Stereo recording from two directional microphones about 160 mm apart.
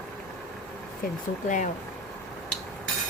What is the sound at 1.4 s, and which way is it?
Speech, 50° left (ahead or behind).